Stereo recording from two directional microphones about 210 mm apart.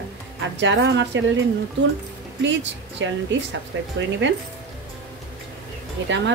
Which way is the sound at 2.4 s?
60° right (ahead or behind).